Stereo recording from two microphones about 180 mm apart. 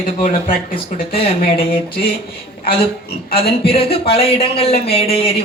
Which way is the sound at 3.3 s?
30° left (ahead or behind).